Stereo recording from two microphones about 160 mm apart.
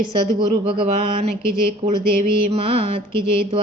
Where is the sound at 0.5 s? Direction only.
35° right (ahead or behind).